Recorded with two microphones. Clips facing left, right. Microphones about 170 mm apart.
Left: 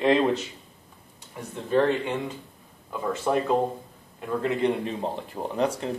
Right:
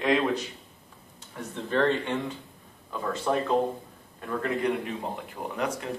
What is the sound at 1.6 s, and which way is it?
Speech, 10° left (ahead or behind).